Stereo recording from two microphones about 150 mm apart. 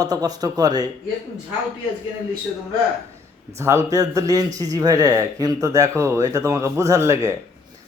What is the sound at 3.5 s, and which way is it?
Speech, 20° right (ahead or behind).